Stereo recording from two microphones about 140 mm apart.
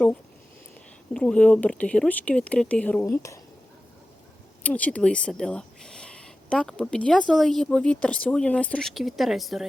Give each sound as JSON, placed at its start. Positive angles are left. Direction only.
{"t": 1.1, "sound": "speech", "side_deg": 5}
{"t": 3.0, "sound": "speech", "side_deg": 20}
{"t": 4.6, "sound": "speech", "side_deg": 10}